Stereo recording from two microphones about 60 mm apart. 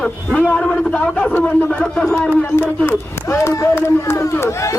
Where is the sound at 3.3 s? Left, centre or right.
Left.